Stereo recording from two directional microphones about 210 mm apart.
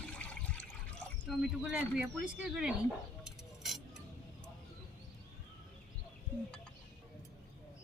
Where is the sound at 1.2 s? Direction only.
5° right (ahead or behind).